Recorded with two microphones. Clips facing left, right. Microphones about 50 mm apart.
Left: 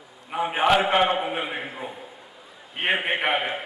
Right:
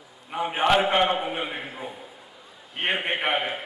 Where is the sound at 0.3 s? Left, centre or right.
Centre.